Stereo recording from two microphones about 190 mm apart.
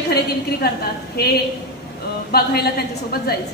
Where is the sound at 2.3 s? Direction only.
55° left (ahead or behind).